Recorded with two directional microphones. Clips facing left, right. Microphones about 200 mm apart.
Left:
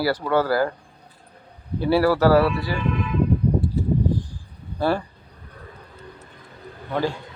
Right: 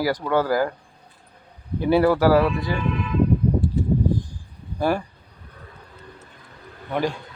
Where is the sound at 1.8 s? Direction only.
15° right (ahead or behind).